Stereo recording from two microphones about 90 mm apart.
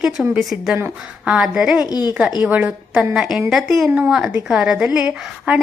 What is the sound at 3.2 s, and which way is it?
A woman's voice, 5° right (ahead or behind).